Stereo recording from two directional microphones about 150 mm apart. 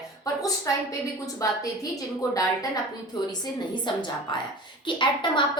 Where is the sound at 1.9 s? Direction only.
25° left (ahead or behind).